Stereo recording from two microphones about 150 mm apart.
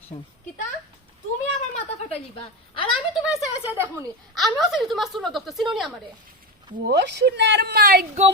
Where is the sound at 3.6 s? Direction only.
15° right (ahead or behind).